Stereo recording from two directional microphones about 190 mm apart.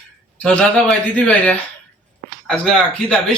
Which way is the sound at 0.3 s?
5° left (ahead or behind).